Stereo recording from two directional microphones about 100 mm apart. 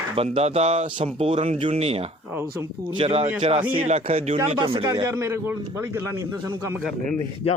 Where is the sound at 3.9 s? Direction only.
90° right.